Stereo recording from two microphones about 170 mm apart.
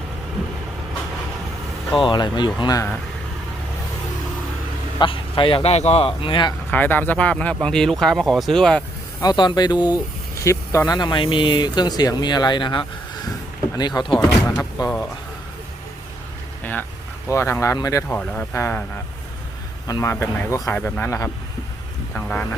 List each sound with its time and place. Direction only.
2.0 s speech: 25° left (ahead or behind)
4.9 s a man's voice: 30° left (ahead or behind)
6.7 s speech: 10° left (ahead or behind)
9.2 s speech: 25° left (ahead or behind)
17.3 s speech: 15° left (ahead or behind)
18.2 s speech: 10° left (ahead or behind)
19.9 s speech: 15° left (ahead or behind)